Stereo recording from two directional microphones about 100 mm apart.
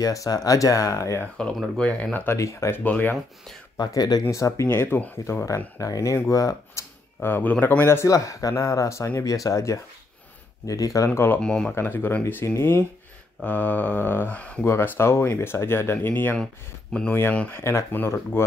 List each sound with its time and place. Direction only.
0.0 s speech: 35° left (ahead or behind)
1.4 s speech: 5° left (ahead or behind)
2.3 s speech: 30° left (ahead or behind)
2.8 s speech: 15° left (ahead or behind)
3.7 s speech: 40° left (ahead or behind)
11.1 s speech: 20° left (ahead or behind)
11.4 s speech: 10° left (ahead or behind)
11.7 s speech: 20° left (ahead or behind)
14.6 s speech: 25° left (ahead or behind)